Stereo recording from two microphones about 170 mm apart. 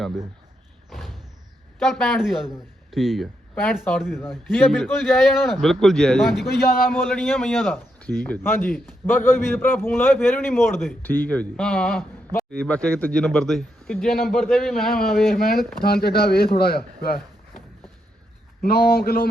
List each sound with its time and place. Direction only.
0.9 s slam: centre (ahead or behind)
1.8 s a man's voice: centre (ahead or behind)
6.5 s speech: 65° left (ahead or behind)
6.9 s a man's voice: 10° left (ahead or behind)
15.8 s speech: 65° left (ahead or behind)
18.6 s speech: 65° left (ahead or behind)